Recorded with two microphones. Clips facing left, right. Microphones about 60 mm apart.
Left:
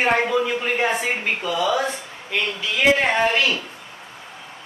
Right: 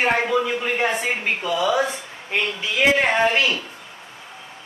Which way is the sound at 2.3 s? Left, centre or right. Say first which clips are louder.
Right 1 dB; right.